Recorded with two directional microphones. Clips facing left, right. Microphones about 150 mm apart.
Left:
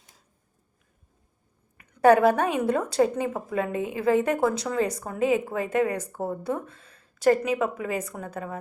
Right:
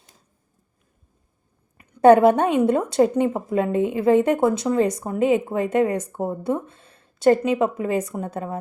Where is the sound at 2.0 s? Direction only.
25° right (ahead or behind).